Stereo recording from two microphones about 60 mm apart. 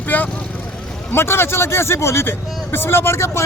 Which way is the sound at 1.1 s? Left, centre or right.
Left.